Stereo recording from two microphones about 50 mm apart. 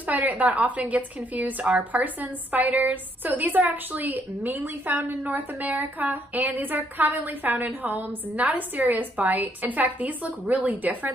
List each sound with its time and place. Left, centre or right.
0.0 s a woman's voice: right